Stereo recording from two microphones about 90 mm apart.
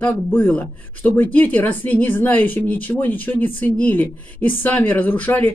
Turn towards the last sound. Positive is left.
turn(degrees=20)  # may be behind; listen again after turning